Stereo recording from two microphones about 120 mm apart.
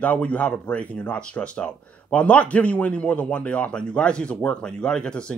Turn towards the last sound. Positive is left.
turn(degrees=10)  # may be behind; listen again after turning